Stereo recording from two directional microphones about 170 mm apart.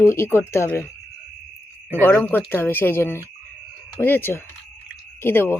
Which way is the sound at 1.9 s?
10° left (ahead or behind).